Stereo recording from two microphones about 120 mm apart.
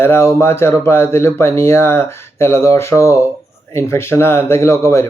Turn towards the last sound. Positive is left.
turn(degrees=25)  # may be behind; listen again after turning